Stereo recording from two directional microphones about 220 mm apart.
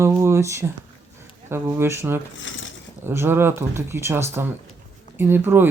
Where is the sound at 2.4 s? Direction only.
60° left (ahead or behind).